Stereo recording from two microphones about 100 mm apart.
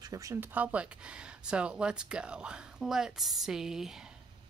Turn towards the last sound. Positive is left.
turn(degrees=-5)  # may be behind; listen again after turning